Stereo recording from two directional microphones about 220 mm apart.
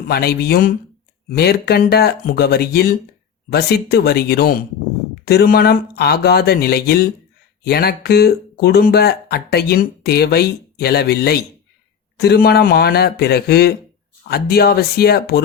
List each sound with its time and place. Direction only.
0.1 s speech: 45° left (ahead or behind)